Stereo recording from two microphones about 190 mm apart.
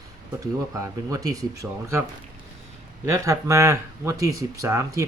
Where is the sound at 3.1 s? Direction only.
15° right (ahead or behind).